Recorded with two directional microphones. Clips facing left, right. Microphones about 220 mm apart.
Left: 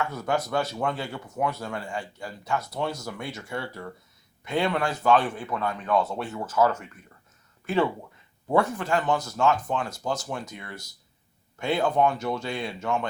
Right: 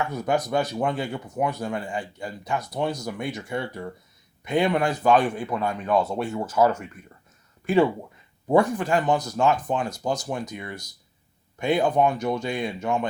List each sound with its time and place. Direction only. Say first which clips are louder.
0.0 s speech: right 3 dB; 15° right (ahead or behind)